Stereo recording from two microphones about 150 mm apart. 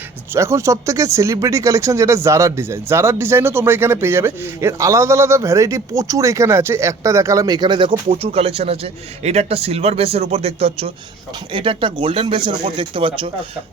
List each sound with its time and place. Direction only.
0.3 s speech: 20° right (ahead or behind); by 13.3 s 35° right (ahead or behind)